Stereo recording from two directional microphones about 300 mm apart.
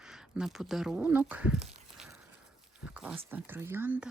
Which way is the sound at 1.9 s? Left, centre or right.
Centre.